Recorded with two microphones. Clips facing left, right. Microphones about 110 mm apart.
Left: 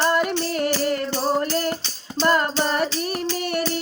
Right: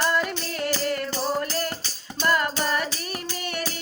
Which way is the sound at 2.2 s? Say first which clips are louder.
Left 4 dB; 40° left (ahead or behind).